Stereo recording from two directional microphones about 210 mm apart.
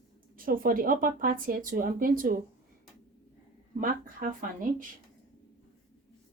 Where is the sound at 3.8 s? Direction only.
40° right (ahead or behind).